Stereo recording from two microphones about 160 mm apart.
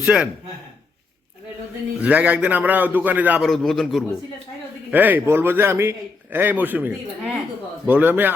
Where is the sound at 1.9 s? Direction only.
10° right (ahead or behind).